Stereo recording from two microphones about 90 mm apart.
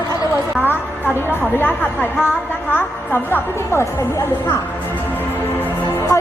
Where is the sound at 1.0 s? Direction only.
30° left (ahead or behind).